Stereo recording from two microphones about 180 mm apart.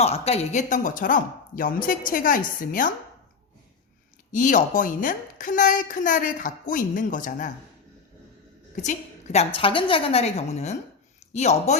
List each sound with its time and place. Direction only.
0.0 s a woman's voice: 35° left (ahead or behind)
4.3 s a woman's voice: 45° left (ahead or behind)
8.7 s a woman's voice: 40° left (ahead or behind)